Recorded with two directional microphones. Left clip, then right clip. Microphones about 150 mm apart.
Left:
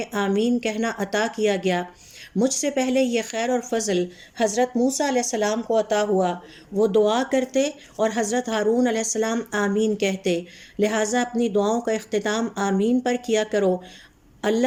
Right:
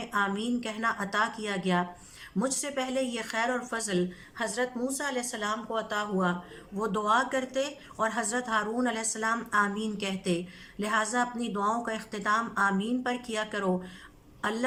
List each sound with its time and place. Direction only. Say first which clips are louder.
0.0 s speech: left 6 dB; 25° left (ahead or behind)